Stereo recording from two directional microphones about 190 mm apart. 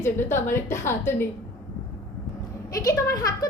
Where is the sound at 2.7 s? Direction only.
20° left (ahead or behind).